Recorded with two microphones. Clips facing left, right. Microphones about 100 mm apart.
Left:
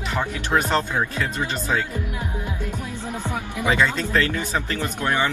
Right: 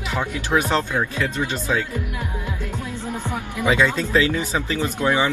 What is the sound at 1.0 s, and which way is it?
Speech, 15° left (ahead or behind).